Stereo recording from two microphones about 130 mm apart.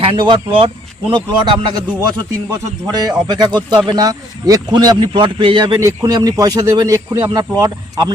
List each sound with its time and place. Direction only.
0.0 s a man's voice: 40° right (ahead or behind)